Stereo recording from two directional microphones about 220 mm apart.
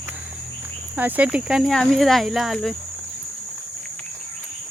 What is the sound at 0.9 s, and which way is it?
Speech, 5° right (ahead or behind).